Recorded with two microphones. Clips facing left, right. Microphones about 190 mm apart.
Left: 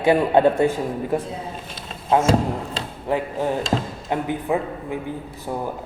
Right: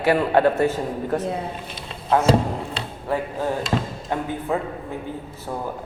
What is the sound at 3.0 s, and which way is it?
A man's voice, 20° left (ahead or behind).